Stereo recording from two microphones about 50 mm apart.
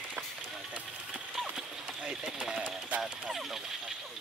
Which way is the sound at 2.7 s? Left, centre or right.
Right.